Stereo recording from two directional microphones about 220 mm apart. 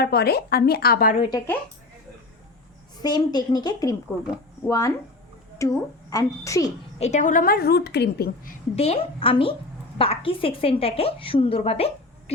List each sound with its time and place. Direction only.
0.0 s a woman's voice: 45° left (ahead or behind)
3.0 s a woman's voice: 20° left (ahead or behind)
7.0 s a woman's voice: 35° left (ahead or behind)
8.7 s a woman's voice: 30° left (ahead or behind)